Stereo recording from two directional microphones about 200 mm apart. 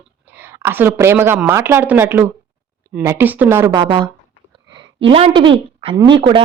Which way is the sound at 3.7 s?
25° right (ahead or behind).